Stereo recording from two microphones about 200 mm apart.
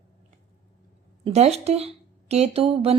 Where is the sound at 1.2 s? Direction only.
30° right (ahead or behind).